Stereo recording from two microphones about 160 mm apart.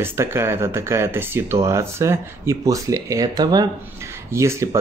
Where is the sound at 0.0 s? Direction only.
15° right (ahead or behind).